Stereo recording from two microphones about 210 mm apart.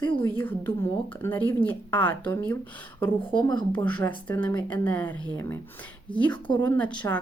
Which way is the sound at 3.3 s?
25° left (ahead or behind).